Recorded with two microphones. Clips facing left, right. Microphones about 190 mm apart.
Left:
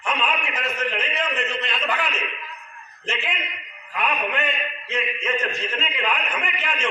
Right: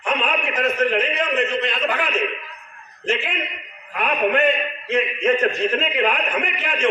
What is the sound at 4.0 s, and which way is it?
A man's voice, 55° right (ahead or behind).